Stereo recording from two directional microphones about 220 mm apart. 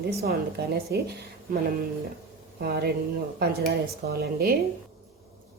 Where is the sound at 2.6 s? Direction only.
45° right (ahead or behind).